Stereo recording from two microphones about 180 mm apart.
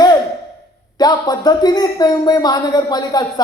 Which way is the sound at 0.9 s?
20° left (ahead or behind).